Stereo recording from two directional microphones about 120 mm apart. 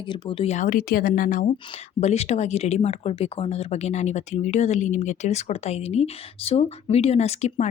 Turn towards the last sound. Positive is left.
turn(degrees=65)  # may be behind; listen again after turning